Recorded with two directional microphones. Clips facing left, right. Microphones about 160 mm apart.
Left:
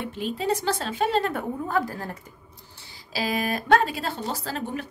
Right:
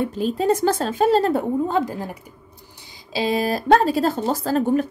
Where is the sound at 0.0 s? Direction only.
40° right (ahead or behind).